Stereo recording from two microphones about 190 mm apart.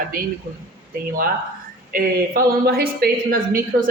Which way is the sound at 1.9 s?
50° right (ahead or behind).